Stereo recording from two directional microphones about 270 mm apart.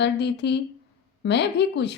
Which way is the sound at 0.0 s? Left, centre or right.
Left.